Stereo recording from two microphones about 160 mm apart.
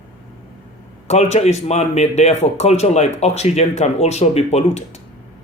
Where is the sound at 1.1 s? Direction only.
45° left (ahead or behind).